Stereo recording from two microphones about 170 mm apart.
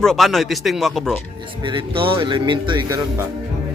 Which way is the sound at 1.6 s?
30° right (ahead or behind).